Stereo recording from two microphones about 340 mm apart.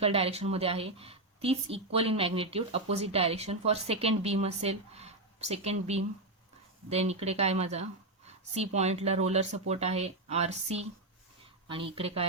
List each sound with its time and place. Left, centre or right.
0.0 s a woman's voice: centre